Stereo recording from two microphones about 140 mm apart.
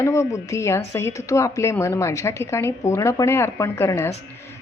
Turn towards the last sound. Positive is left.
turn(degrees=20)  # may be behind; listen again after turning